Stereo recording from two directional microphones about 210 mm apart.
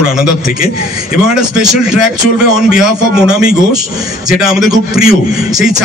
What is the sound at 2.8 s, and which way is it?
A man's voice, 5° right (ahead or behind).